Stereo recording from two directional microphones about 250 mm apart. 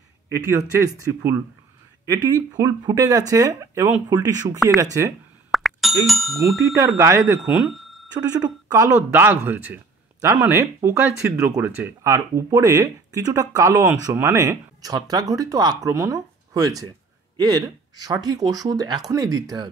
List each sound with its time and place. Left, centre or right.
0.5 s speech: centre
5.5 s plop: centre
6.0 s speech: centre
7.0 s speech: centre